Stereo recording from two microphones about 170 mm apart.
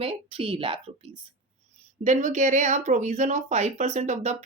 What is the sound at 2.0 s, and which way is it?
Speech, 45° right (ahead or behind).